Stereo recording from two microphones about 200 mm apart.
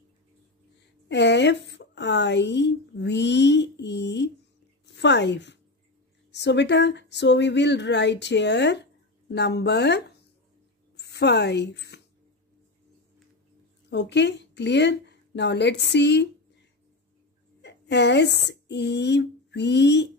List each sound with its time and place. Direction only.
1.0 s a woman's voice: 60° left (ahead or behind)
13.8 s a woman's voice: 60° left (ahead or behind)
17.6 s a woman's voice: 60° left (ahead or behind)